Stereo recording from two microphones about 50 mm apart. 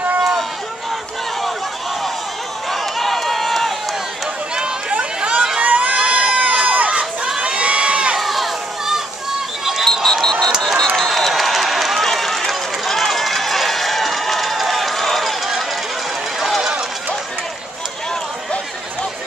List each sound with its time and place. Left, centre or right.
0.2 s run: centre
2.7 s run: centre
4.6 s run: centre
5.6 s crowd: right
8.2 s children playing: centre
9.8 s a sound: centre
10.6 s crowd: centre
11.0 s a sound: centre
12.1 s run: centre